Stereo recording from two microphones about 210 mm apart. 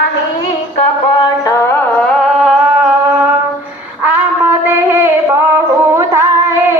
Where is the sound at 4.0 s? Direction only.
10° right (ahead or behind).